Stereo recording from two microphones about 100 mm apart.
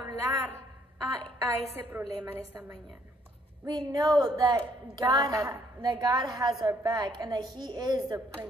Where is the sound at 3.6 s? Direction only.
45° right (ahead or behind).